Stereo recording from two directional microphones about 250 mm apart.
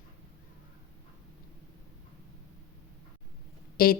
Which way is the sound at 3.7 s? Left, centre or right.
Left.